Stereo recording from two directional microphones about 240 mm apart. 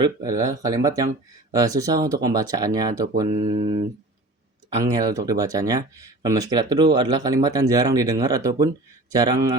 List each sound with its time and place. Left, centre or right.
0.0 s speech: centre
3.2 s speech: right